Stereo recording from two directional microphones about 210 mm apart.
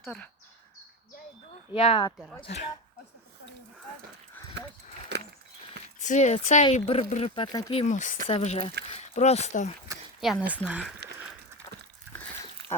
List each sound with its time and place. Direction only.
0.0 s speech: 5° left (ahead or behind)
1.7 s speech: 25° left (ahead or behind)
2.1 s speech: 5° right (ahead or behind)
2.4 s speech: 30° left (ahead or behind)
5.1 s a sound: 55° right (ahead or behind)
6.0 s speech: 35° left (ahead or behind)
10.7 s speech: 5° right (ahead or behind)